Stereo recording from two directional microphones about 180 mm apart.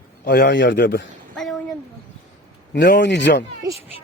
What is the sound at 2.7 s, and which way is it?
Speech, 75° left (ahead or behind).